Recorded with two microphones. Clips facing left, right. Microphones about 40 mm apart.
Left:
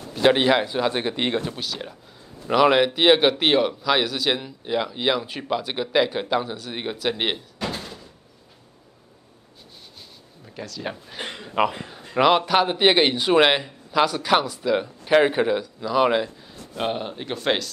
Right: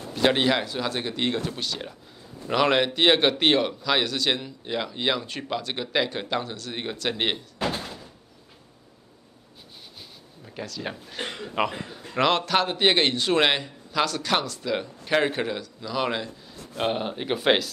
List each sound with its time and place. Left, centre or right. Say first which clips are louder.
0.1 s a man's voice: left 4 dB; centre
1.5 s speech: left 1 dB; centre
7.6 s door: right 2 dB; right
10.4 s a man's voice: left 1 dB; centre
16.7 s speech: even; centre